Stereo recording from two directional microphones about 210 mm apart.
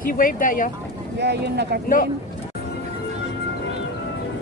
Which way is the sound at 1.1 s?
55° right (ahead or behind).